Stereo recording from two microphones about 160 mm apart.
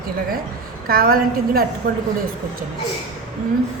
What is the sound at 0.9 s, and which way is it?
Speech, 65° right (ahead or behind).